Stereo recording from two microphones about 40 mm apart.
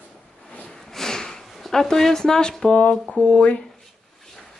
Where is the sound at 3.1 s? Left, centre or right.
Left.